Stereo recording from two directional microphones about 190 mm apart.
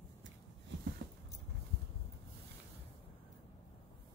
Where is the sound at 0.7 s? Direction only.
70° right (ahead or behind).